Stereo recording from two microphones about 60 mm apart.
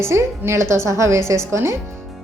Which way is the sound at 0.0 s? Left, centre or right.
Right.